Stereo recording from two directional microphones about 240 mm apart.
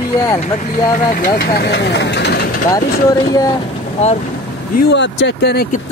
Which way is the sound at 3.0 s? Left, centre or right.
Centre.